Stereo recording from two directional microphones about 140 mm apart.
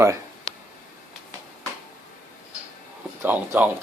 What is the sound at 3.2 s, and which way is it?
Speech, 15° right (ahead or behind).